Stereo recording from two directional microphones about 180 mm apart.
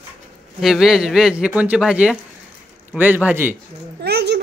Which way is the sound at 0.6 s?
Centre (ahead or behind).